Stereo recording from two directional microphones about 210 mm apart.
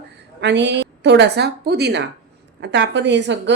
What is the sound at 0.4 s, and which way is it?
Speech, 55° right (ahead or behind).